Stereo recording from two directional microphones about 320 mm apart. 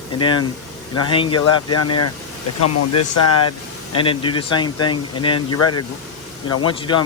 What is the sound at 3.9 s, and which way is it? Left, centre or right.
Speech, centre.